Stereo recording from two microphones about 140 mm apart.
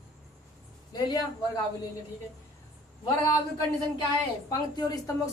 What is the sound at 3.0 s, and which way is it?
A woman's voice, 25° left (ahead or behind).